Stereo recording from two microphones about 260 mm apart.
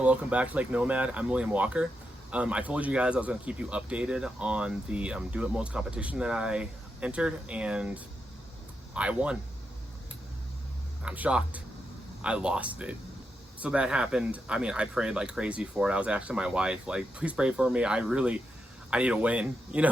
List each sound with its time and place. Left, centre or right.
0.0 s speech: centre
11.0 s speech: centre